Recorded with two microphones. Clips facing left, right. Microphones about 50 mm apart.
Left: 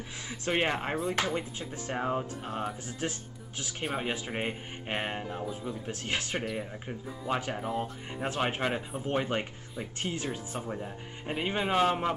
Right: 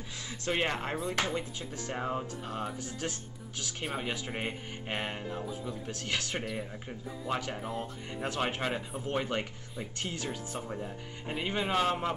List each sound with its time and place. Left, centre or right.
0.3 s speech: centre
4.3 s speech: centre
6.4 s speech: centre